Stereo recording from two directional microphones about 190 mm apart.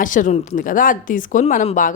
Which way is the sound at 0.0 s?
45° left (ahead or behind).